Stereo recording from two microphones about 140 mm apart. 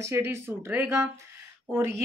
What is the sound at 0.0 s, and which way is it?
Speech, 20° right (ahead or behind).